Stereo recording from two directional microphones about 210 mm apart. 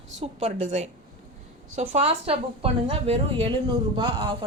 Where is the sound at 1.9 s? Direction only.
25° right (ahead or behind).